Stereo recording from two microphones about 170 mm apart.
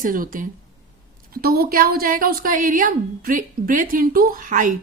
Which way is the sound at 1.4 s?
65° right (ahead or behind).